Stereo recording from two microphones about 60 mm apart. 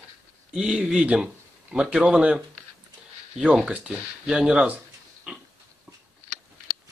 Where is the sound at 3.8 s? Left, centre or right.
Centre.